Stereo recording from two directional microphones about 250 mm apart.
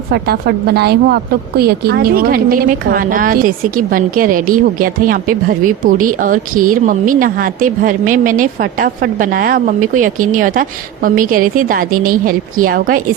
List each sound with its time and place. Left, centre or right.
0.1 s a woman's voice: right